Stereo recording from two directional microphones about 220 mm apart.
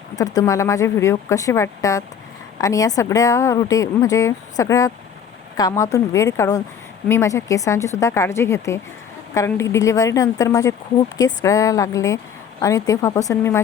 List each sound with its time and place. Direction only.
0.2 s speech: 15° left (ahead or behind)